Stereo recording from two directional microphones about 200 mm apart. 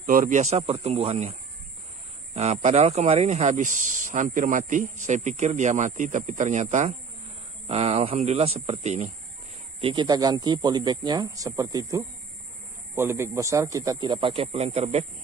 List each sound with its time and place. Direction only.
0.0 s speech: 45° right (ahead or behind)
2.3 s speech: 35° right (ahead or behind)